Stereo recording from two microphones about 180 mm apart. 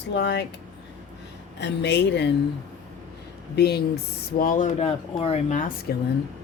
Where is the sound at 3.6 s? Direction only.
65° left (ahead or behind); by 5.7 s 40° left (ahead or behind).